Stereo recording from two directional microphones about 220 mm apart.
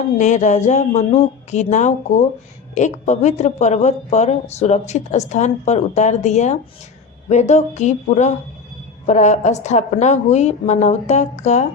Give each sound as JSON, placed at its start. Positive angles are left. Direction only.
{"t": 0.2, "sound": "speech", "side_deg": 35}